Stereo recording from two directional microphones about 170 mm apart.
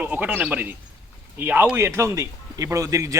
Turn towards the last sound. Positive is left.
turn(degrees=-20)  # may be behind; listen again after turning